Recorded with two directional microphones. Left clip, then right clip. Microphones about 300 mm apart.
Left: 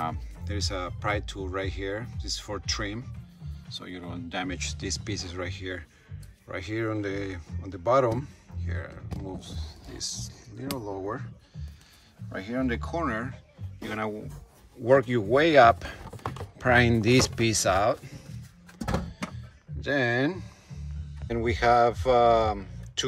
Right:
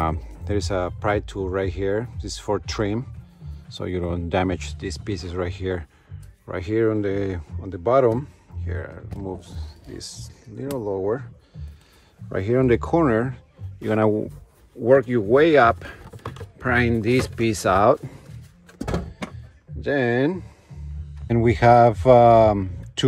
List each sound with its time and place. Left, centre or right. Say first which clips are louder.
0.5 s speech: right 8 dB; centre
10.7 s speech: right 8 dB; centre
11.1 s speech: right 9 dB; centre
12.4 s speech: right 11 dB; centre
14.9 s speech: right 5 dB; centre
19.0 s a sound: right 3 dB; centre
21.5 s speech: right 7 dB; centre